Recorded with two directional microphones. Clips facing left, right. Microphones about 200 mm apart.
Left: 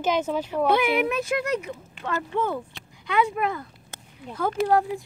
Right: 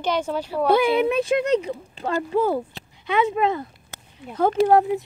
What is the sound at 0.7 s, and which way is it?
Speech, 30° right (ahead or behind).